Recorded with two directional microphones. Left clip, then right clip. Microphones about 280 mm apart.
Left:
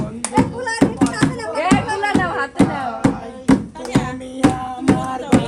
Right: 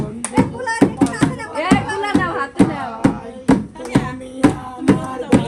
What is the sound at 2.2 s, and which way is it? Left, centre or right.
Music, left.